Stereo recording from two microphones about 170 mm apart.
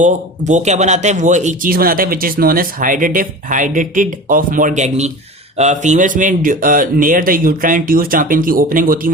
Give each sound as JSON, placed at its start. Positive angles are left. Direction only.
{"t": 0.0, "sound": "a man's voice", "side_deg": -45}